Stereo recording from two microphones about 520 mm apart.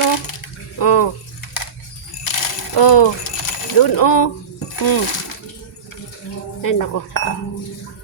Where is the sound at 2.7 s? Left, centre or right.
Left.